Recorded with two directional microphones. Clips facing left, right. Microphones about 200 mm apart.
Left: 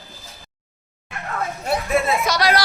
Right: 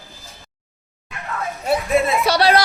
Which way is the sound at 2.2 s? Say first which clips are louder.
Right 4 dB; 30° right (ahead or behind).